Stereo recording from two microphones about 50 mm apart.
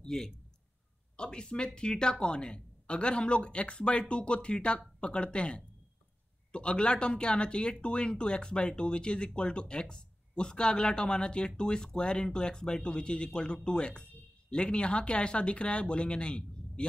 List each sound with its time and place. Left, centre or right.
0.0 s a man's voice: centre